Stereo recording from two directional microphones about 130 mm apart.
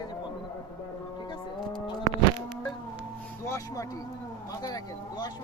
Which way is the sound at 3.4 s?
25° left (ahead or behind).